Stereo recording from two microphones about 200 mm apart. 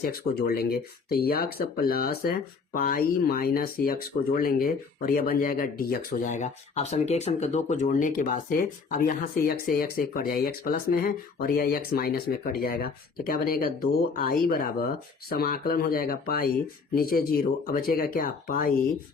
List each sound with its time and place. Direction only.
0.0 s speech: 50° left (ahead or behind)